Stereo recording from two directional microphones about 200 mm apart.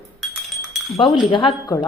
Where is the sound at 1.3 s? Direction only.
25° left (ahead or behind).